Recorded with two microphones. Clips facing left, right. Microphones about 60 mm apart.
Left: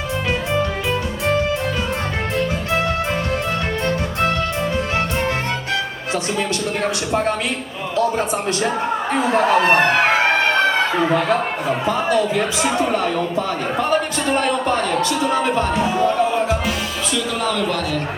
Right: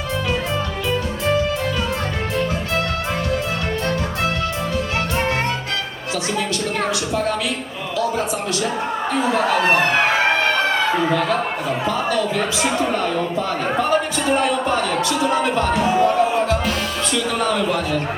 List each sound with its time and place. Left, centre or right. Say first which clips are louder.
7.1 s speech: left 5 dB; left
9.1 s speech: left 2 dB; left
11.1 s speech: left 1 dB; left
12.4 s speech: left 1 dB; centre
14.3 s a man's voice: left 1 dB; centre
15.3 s speech: even; left
16.0 s speech: right 1 dB; centre
17.4 s a man's voice: right 1 dB; centre